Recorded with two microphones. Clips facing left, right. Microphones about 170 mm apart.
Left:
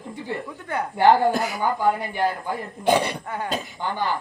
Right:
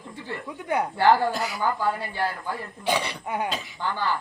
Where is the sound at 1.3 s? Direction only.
50° left (ahead or behind).